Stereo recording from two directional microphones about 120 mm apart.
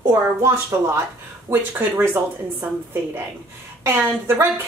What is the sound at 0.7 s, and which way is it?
A woman's voice, 20° right (ahead or behind).